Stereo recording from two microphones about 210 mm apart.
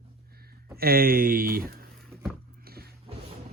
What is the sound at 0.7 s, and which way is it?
Speech, 45° right (ahead or behind).